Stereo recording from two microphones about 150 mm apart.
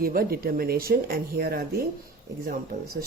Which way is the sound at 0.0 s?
80° right.